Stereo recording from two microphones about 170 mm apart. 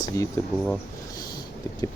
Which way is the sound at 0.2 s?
20° left (ahead or behind).